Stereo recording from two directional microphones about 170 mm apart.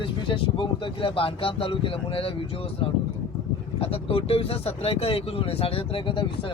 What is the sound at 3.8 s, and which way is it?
Speech, 35° left (ahead or behind).